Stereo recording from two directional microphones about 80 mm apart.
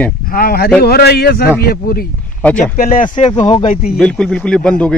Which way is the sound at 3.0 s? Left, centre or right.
Left.